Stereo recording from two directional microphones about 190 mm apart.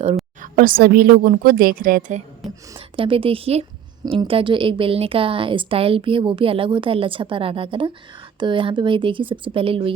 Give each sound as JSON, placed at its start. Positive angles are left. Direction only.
{"t": 0.5, "sound": "a woman's voice", "side_deg": -50}
{"t": 2.9, "sound": "a woman's voice", "side_deg": -30}